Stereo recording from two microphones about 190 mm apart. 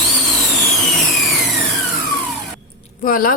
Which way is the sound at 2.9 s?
50° left (ahead or behind).